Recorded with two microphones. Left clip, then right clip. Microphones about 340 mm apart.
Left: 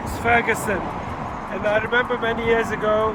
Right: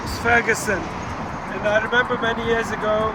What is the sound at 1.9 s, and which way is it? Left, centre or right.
Speech, centre.